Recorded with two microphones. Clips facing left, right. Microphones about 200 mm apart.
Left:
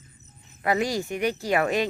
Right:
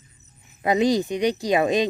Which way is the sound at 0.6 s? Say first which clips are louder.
Right 5 dB; 20° right (ahead or behind).